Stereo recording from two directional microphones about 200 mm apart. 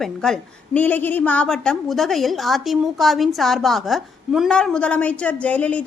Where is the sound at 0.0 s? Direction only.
Centre (ahead or behind).